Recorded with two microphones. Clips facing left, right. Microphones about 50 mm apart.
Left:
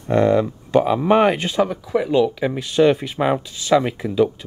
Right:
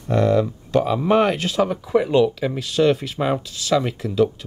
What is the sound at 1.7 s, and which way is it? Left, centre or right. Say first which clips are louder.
Speech: right 1 dB; centre.